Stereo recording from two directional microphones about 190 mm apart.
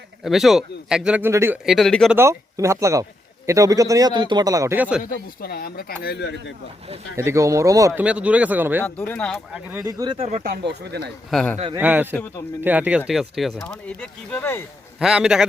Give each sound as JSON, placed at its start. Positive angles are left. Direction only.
{"t": 0.3, "sound": "speech", "side_deg": 0}
{"t": 1.6, "sound": "speech", "side_deg": 0}
{"t": 2.1, "sound": "a man's voice", "side_deg": -15}
{"t": 5.0, "sound": "speech", "side_deg": 50}
{"t": 7.2, "sound": "a man's voice", "side_deg": -15}
{"t": 8.8, "sound": "speech", "side_deg": 10}
{"t": 10.2, "sound": "speech", "side_deg": -40}
{"t": 11.3, "sound": "speech", "side_deg": 0}
{"t": 11.8, "sound": "a man's voice", "side_deg": -10}
{"t": 14.9, "sound": "speech", "side_deg": -5}